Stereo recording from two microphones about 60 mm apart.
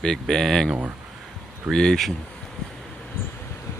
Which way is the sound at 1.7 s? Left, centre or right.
Centre.